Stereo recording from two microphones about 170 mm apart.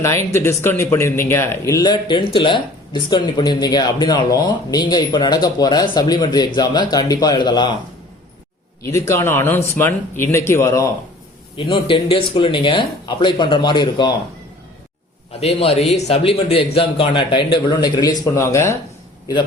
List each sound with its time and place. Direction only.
0.3 s speech: 15° left (ahead or behind)
8.8 s speech: 15° left (ahead or behind)
11.5 s speech: 30° left (ahead or behind)
15.3 s a man's voice: 35° left (ahead or behind); by 18.8 s 15° left (ahead or behind)